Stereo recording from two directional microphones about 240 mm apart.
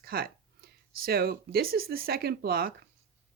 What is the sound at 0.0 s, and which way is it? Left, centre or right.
Speech, right.